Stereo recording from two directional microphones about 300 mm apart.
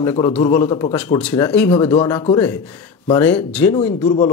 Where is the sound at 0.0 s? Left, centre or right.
Centre.